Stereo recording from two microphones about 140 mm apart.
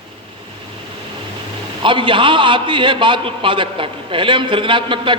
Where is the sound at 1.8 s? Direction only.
35° right (ahead or behind).